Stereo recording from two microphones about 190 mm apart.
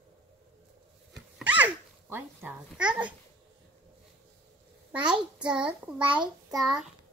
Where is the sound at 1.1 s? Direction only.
5° right (ahead or behind).